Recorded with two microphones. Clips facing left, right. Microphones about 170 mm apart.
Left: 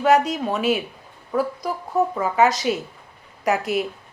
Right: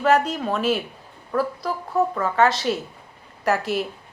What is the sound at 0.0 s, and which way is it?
A woman's voice, 10° left (ahead or behind).